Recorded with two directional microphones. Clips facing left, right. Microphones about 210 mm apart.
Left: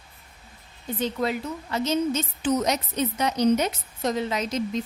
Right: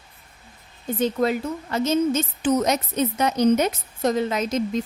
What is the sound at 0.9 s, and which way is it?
A woman's voice, 45° right (ahead or behind).